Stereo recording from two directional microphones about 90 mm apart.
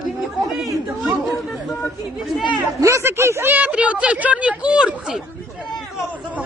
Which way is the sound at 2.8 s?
35° right (ahead or behind).